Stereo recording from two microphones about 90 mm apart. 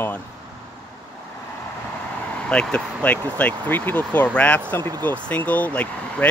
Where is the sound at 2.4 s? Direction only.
10° left (ahead or behind).